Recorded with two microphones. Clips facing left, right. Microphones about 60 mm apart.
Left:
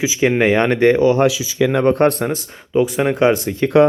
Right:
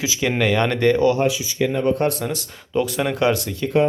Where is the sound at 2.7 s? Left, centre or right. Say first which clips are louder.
Left 5 dB; centre.